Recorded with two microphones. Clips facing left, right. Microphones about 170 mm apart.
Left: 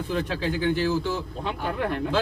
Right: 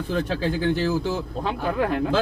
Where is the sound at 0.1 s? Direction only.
45° right (ahead or behind).